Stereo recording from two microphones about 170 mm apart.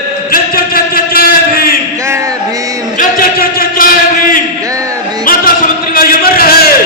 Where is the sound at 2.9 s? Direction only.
55° left (ahead or behind).